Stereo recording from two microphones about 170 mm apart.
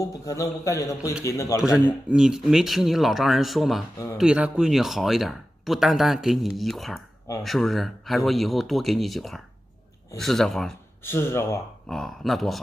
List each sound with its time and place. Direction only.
0.0 s a man's voice: 20° left (ahead or behind)
2.0 s speech: 5° right (ahead or behind)
11.1 s speech: 15° left (ahead or behind)
11.9 s speech: centre (ahead or behind)